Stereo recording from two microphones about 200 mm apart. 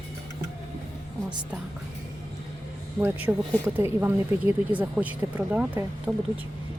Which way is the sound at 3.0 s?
10° right (ahead or behind).